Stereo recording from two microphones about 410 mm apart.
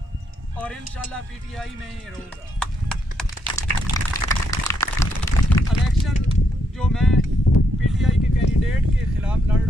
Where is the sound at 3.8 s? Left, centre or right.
Centre.